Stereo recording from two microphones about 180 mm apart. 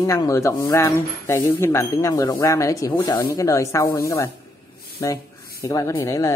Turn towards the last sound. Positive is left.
turn(degrees=20)  # may be behind; listen again after turning